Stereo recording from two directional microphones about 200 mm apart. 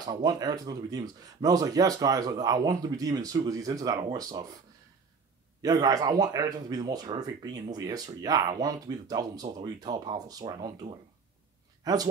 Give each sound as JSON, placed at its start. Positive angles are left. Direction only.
{"t": 0.0, "sound": "speech", "side_deg": -20}
{"t": 5.6, "sound": "speech", "side_deg": -20}